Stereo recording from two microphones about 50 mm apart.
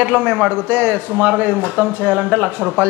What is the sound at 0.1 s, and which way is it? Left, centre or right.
A man's voice, right.